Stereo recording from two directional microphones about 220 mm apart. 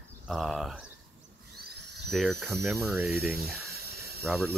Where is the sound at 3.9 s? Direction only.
45° right (ahead or behind).